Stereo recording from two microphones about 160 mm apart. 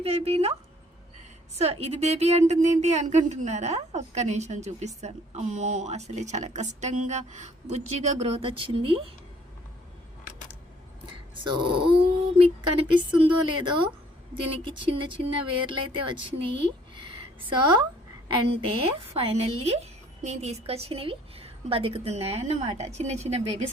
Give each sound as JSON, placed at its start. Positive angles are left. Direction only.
{"t": 0.0, "sound": "a woman's voice", "side_deg": -40}
{"t": 1.5, "sound": "a woman's voice", "side_deg": -40}
{"t": 11.0, "sound": "a sound", "side_deg": -30}
{"t": 12.4, "sound": "a woman's voice", "side_deg": -30}
{"t": 18.3, "sound": "a woman's voice", "side_deg": -35}